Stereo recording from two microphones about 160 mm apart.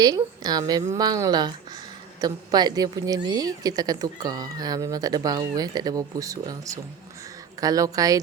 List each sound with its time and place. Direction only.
0.0 s a woman's voice: 25° right (ahead or behind)